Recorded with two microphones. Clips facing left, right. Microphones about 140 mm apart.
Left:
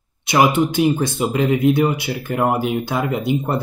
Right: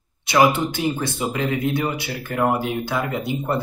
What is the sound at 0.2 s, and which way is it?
Speech, 15° left (ahead or behind).